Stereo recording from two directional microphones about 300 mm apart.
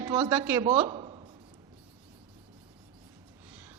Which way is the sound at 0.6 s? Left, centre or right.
Centre.